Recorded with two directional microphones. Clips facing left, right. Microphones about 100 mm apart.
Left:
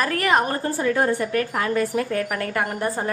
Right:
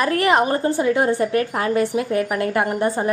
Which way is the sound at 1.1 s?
30° right (ahead or behind).